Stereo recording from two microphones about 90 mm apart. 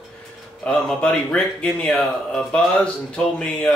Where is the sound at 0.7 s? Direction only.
10° left (ahead or behind).